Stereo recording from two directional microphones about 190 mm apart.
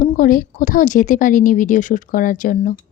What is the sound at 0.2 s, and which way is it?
A woman's voice, 45° left (ahead or behind).